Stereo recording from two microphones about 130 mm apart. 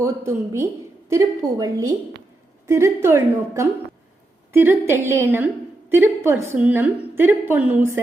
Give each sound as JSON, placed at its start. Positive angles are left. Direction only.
{"t": 0.0, "sound": "a woman's voice", "side_deg": -20}